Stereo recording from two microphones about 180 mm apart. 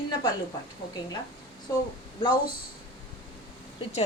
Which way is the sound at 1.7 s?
20° left (ahead or behind).